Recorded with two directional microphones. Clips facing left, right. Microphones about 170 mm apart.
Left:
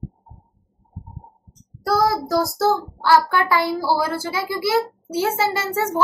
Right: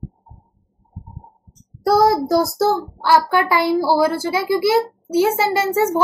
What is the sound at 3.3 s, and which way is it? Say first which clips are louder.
A child's voice: right 3 dB; 15° right (ahead or behind).